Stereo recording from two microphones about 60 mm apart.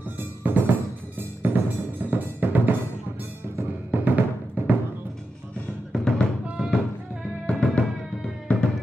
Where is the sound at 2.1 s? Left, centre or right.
Right.